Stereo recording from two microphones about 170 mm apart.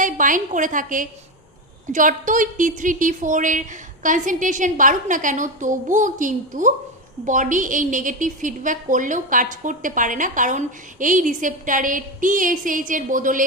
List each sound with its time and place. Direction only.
0.0 s a woman's voice: 50° right (ahead or behind)